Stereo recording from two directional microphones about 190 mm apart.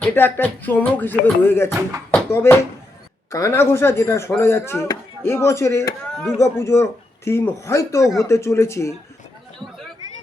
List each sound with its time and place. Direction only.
0.0 s speech: 10° left (ahead or behind)
2.0 s a sound: 10° left (ahead or behind)
3.3 s speech: 15° left (ahead or behind)
6.1 s speech: centre (ahead or behind)
6.4 s speech: 15° left (ahead or behind)